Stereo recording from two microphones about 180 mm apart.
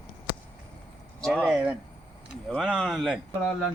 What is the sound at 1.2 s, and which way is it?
Speech, centre (ahead or behind).